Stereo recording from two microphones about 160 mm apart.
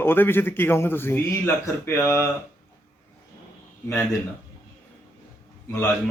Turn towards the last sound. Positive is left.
turn(degrees=15)  # may be behind; listen again after turning